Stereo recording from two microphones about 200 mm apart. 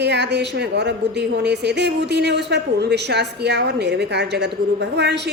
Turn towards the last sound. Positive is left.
turn(degrees=-60)  # may be behind; listen again after turning